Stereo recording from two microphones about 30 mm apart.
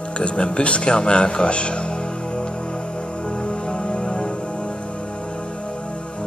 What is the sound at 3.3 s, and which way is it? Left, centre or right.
Music, left.